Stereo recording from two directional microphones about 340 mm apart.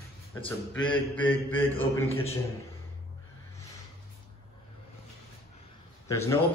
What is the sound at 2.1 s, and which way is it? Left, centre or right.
Speech, centre.